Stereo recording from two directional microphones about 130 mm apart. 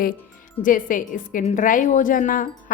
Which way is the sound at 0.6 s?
90° left.